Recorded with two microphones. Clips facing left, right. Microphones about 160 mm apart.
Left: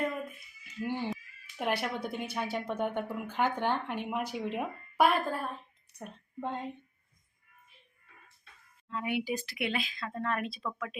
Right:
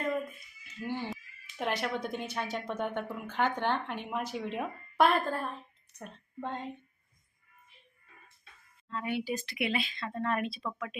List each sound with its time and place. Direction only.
0.8 s cat: 15° left (ahead or behind)
1.1 s speech: 10° left (ahead or behind)
8.9 s speech: 15° left (ahead or behind)
9.5 s speech: centre (ahead or behind)